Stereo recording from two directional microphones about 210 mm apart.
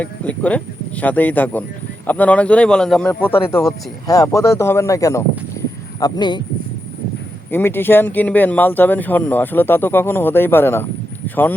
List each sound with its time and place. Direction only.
0.0 s speech: 5° left (ahead or behind)
3.5 s speech: 15° left (ahead or behind)
7.5 s speech: 10° left (ahead or behind)